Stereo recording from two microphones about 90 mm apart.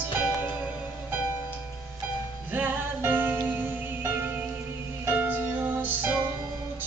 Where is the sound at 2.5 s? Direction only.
20° right (ahead or behind).